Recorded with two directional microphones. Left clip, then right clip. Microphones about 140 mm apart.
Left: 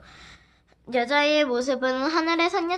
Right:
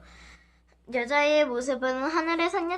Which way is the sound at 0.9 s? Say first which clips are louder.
Left 2 dB; 40° left (ahead or behind).